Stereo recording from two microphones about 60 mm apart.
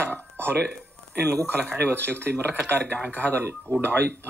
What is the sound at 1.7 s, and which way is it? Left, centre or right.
Speech, right.